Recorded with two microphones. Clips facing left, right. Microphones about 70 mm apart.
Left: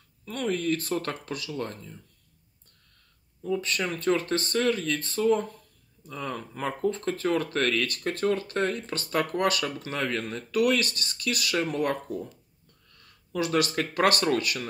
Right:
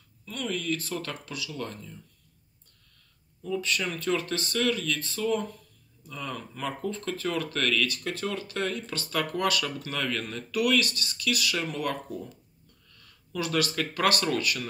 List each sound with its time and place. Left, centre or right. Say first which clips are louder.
0.2 s speech: left 4 dB; left
3.4 s speech: left 1 dB; left
13.3 s speech: left 3 dB; left